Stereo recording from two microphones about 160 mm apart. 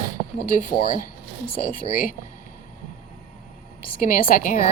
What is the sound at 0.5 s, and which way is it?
Speech, 60° left (ahead or behind).